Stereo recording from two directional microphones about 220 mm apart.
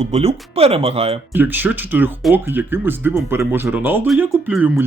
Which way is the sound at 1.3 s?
10° right (ahead or behind).